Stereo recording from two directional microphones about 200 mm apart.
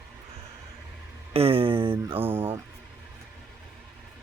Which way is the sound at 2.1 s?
10° right (ahead or behind).